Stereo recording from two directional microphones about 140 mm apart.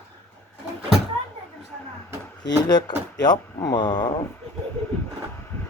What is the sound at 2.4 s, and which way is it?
Speech, 30° left (ahead or behind).